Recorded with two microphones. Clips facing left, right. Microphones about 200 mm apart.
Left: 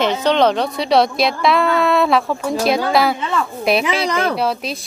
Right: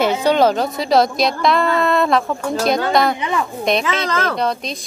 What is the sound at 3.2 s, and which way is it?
Speech, 15° right (ahead or behind).